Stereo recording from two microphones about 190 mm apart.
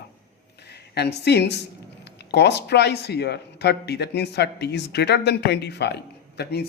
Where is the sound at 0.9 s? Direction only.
60° left (ahead or behind).